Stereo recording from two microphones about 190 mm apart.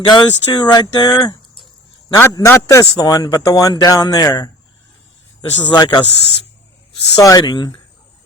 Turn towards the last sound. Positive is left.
turn(degrees=20)  # may be behind; listen again after turning